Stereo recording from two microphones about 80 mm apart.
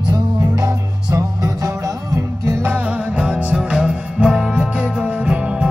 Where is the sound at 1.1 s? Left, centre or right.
Right.